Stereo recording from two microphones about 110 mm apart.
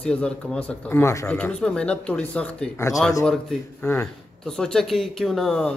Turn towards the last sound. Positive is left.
turn(degrees=5)  # may be behind; listen again after turning